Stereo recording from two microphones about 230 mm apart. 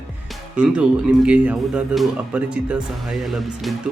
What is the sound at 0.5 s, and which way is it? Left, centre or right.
Speech, centre.